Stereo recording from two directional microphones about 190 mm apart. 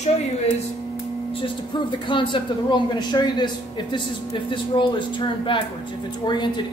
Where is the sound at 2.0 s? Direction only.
25° left (ahead or behind).